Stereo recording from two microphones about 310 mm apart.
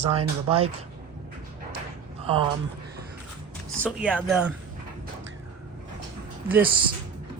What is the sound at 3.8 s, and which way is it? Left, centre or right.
Speech, centre.